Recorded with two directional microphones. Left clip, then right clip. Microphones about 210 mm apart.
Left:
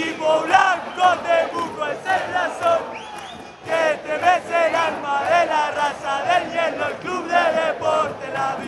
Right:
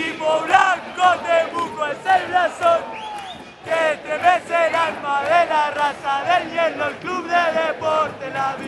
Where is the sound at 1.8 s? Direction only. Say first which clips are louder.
Right 5 dB; centre (ahead or behind).